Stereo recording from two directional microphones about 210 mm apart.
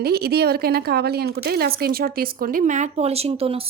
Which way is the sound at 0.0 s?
50° right (ahead or behind).